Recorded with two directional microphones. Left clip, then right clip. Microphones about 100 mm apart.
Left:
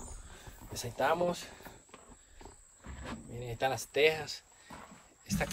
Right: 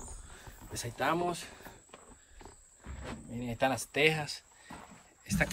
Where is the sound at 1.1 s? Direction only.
Centre (ahead or behind).